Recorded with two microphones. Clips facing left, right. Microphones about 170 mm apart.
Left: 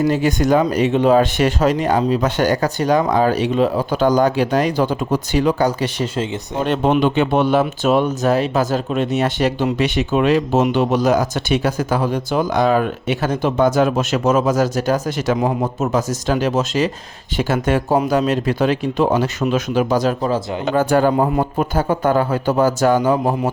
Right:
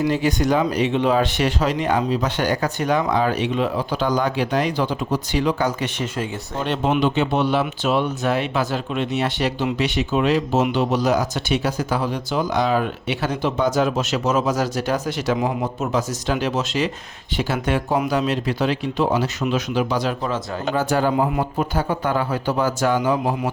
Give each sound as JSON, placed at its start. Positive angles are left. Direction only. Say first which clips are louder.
{"t": 0.0, "sound": "speech", "louder": "left 3 dB", "side_deg": 45}
{"t": 6.7, "sound": "speech", "louder": "left 4 dB", "side_deg": 50}
{"t": 20.7, "sound": "speech", "louder": "left 5 dB", "side_deg": 50}